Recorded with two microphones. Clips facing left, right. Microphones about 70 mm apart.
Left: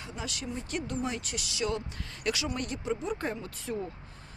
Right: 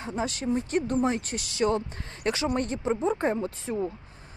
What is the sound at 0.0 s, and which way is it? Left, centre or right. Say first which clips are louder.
Speech: right 8 dB; right.